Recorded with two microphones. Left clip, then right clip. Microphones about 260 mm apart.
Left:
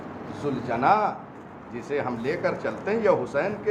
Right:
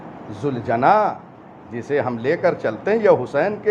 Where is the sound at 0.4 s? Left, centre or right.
Right.